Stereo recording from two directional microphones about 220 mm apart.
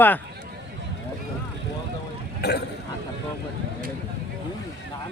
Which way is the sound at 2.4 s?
50° left (ahead or behind).